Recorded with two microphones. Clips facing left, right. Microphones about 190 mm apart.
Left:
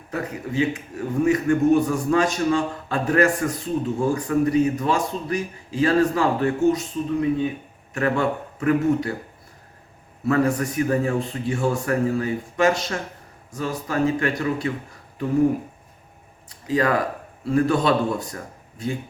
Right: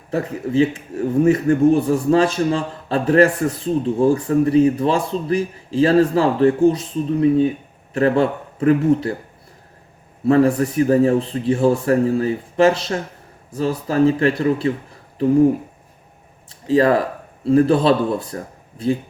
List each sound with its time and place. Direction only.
0.1 s a man's voice: 30° right (ahead or behind)
10.2 s a man's voice: 30° right (ahead or behind)
16.5 s a man's voice: 30° right (ahead or behind)